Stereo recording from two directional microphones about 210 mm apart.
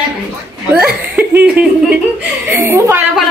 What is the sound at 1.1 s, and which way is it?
A woman's voice, 5° right (ahead or behind).